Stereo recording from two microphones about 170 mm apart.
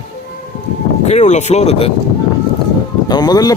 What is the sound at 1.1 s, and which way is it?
Speech, 40° left (ahead or behind).